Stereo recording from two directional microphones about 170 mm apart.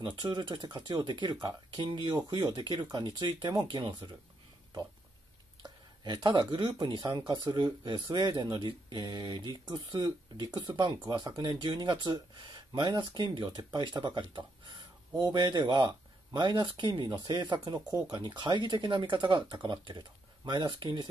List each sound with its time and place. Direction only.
0.0 s speech: 30° right (ahead or behind)
5.6 s a sound: 25° right (ahead or behind)
6.8 s speech: 25° right (ahead or behind)